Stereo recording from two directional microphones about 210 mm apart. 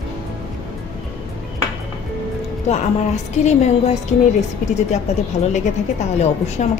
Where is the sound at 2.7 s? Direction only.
35° left (ahead or behind).